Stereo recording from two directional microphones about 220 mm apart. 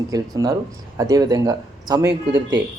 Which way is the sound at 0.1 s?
15° right (ahead or behind).